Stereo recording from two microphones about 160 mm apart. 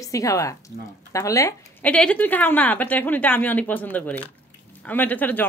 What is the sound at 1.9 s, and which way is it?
A woman's voice, 10° left (ahead or behind).